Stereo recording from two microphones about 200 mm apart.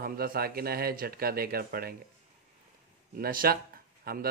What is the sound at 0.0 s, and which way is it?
Speech, 45° right (ahead or behind).